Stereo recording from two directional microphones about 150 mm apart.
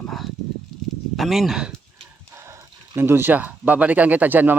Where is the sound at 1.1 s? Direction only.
Centre (ahead or behind).